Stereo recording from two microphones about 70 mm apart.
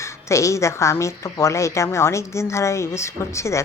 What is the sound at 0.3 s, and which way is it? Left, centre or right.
A woman's voice, left.